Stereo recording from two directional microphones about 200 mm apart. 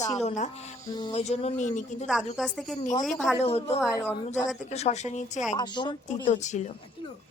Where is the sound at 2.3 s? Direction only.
Centre (ahead or behind).